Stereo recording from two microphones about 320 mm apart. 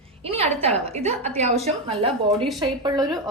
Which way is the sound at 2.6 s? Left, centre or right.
Centre.